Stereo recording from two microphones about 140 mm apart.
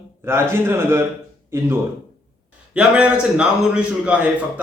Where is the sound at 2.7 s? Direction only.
10° right (ahead or behind).